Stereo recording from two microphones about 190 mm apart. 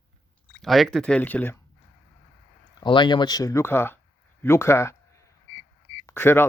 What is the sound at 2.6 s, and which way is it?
A man's voice, 25° left (ahead or behind).